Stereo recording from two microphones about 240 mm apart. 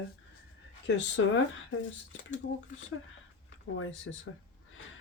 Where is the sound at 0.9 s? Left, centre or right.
Left.